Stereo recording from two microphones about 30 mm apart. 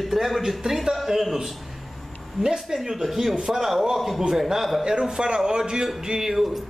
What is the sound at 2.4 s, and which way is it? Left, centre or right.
A man's voice, centre.